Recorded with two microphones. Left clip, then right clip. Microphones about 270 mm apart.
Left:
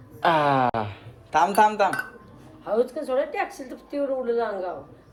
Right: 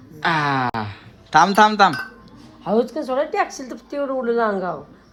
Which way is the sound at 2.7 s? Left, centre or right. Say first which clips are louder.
Right 3 dB; right.